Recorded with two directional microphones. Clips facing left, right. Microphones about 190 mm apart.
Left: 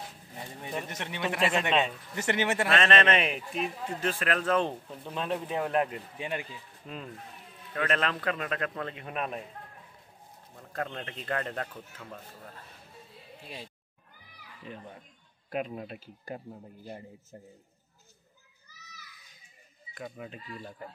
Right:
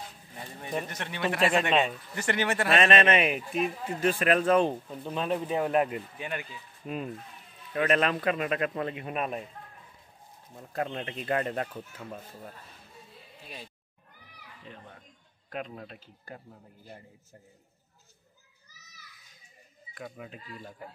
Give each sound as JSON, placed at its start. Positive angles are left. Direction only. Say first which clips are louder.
{"t": 0.8, "sound": "a man's voice", "louder": "right 2 dB", "side_deg": 20}
{"t": 2.7, "sound": "speech", "louder": "right 3 dB", "side_deg": -15}
{"t": 6.1, "sound": "a man's voice", "louder": "left 1 dB", "side_deg": 25}
{"t": 6.8, "sound": "speech", "louder": "right 6 dB", "side_deg": -10}
{"t": 10.5, "sound": "speech", "louder": "right 3 dB", "side_deg": -15}
{"t": 15.5, "sound": "a man's voice", "louder": "left 4 dB", "side_deg": 10}
{"t": 19.9, "sound": "speech", "louder": "left 1 dB", "side_deg": 0}